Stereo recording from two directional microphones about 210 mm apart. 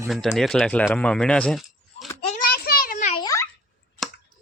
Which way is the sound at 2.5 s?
45° left (ahead or behind).